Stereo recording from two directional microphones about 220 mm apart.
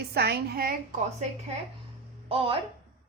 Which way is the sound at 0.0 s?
45° right (ahead or behind).